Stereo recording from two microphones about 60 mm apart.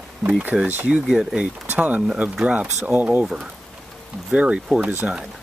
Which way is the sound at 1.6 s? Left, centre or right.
Right.